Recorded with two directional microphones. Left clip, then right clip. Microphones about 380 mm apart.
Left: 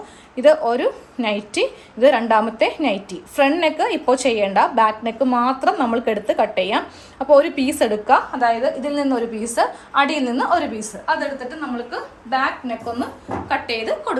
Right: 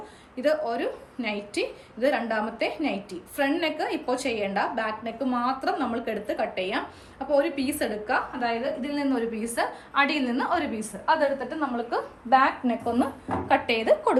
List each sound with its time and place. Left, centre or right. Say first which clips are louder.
0.7 s a woman's voice: left 9 dB; centre
11.9 s a woman's voice: right 4 dB; centre